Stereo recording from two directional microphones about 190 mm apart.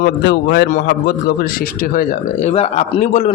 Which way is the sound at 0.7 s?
50° left (ahead or behind).